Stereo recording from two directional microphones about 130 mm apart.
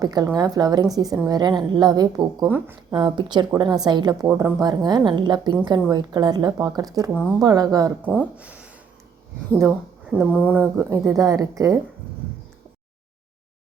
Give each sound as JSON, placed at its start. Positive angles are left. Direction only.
{"t": 0.0, "sound": "a woman's voice", "side_deg": -30}
{"t": 4.3, "sound": "speech", "side_deg": -20}
{"t": 4.6, "sound": "a woman's voice", "side_deg": -30}
{"t": 8.0, "sound": "a woman's voice", "side_deg": -10}